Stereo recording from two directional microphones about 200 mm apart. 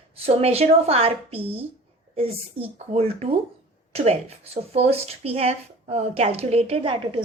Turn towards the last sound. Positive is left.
turn(degrees=-25)  # may be behind; listen again after turning